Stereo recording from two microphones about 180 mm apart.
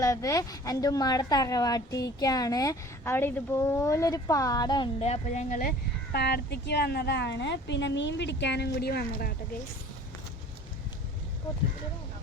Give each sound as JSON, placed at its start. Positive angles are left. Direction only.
{"t": 0.0, "sound": "a woman's voice", "side_deg": 20}
{"t": 6.1, "sound": "a woman's voice", "side_deg": 65}